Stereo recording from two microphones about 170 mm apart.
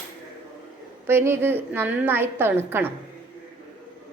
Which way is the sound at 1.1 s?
15° right (ahead or behind).